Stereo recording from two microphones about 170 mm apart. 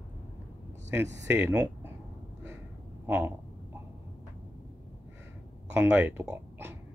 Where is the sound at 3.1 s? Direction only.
10° right (ahead or behind).